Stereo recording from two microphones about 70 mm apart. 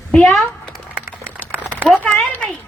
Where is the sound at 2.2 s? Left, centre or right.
Left.